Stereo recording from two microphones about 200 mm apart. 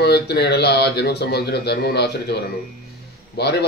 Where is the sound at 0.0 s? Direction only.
55° left (ahead or behind).